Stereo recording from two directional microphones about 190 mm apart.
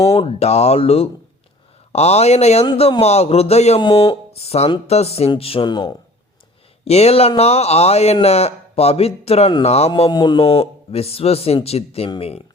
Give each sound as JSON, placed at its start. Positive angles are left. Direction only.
{"t": 0.0, "sound": "speech", "side_deg": 30}
{"t": 6.8, "sound": "speech", "side_deg": 35}
{"t": 9.9, "sound": "speech", "side_deg": 20}